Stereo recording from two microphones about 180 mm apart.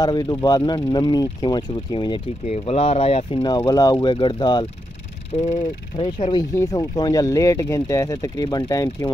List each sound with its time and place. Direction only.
0.0 s speech: 25° left (ahead or behind)
5.3 s speech: 35° left (ahead or behind)
6.5 s speech: 20° left (ahead or behind)